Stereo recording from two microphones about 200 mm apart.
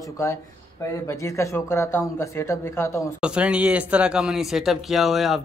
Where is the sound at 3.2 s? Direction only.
5° right (ahead or behind).